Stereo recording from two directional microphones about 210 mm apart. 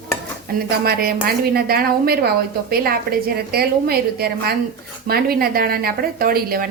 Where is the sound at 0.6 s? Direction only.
45° right (ahead or behind).